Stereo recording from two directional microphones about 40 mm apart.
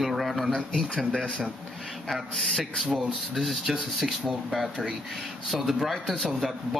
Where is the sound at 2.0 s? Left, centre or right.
Centre.